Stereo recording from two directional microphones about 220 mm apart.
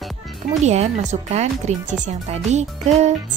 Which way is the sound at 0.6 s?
30° right (ahead or behind).